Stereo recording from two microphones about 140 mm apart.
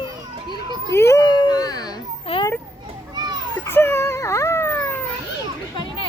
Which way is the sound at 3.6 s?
20° left (ahead or behind).